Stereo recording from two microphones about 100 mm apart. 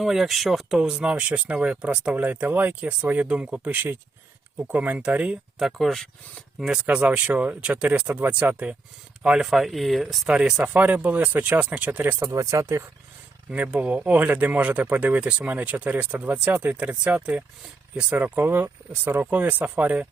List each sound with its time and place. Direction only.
0.0 s speech: centre (ahead or behind)
5.5 s speech: centre (ahead or behind)
12.2 s speech: 30° right (ahead or behind)
13.5 s speech: 15° right (ahead or behind)